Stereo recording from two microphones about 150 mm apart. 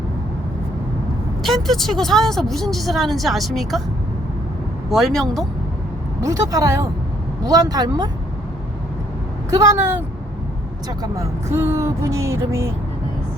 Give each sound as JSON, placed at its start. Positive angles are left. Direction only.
{"t": 1.4, "sound": "speech", "side_deg": 0}
{"t": 4.9, "sound": "speech", "side_deg": 0}
{"t": 6.2, "sound": "speech", "side_deg": -25}
{"t": 9.5, "sound": "speech", "side_deg": -20}